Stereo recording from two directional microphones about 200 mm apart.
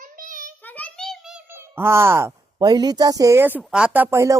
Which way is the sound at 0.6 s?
10° left (ahead or behind).